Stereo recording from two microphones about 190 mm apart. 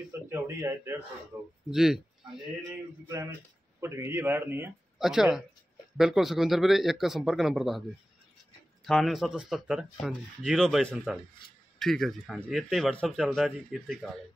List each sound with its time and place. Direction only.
0.3 s speech: 15° right (ahead or behind)
3.1 s speech: 15° right (ahead or behind); by 7.8 s centre (ahead or behind)
8.8 s speech: centre (ahead or behind)